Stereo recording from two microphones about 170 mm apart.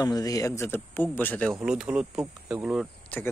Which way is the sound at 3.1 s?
10° left (ahead or behind).